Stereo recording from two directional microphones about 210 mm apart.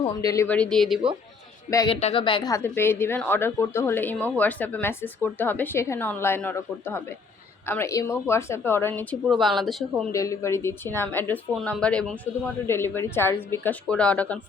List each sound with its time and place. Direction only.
0.2 s a woman's voice: 15° left (ahead or behind)
1.7 s a woman's voice: 20° left (ahead or behind)
2.0 s a woman's voice: 30° left (ahead or behind); by 10.1 s centre (ahead or behind)
10.1 s a woman's voice: 15° left (ahead or behind)